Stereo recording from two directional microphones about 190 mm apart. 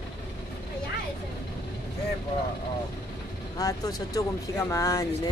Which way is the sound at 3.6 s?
20° left (ahead or behind).